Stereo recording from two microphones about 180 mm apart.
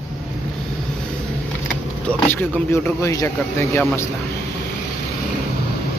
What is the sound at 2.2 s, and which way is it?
Speech, 10° left (ahead or behind).